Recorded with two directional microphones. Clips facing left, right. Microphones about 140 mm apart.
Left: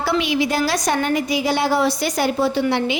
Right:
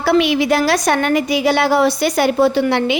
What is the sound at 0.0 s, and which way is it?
A woman's voice, 65° right (ahead or behind).